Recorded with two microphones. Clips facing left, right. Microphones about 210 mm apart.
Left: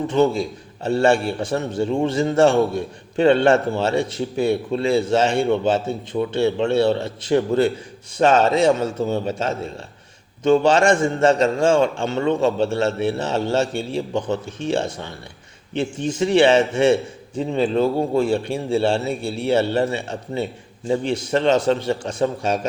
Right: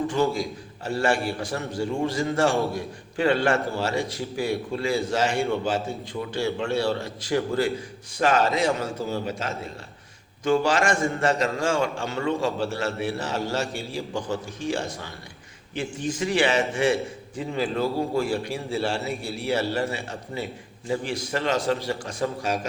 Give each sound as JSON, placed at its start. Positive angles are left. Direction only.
{"t": 0.1, "sound": "a man's voice", "side_deg": 25}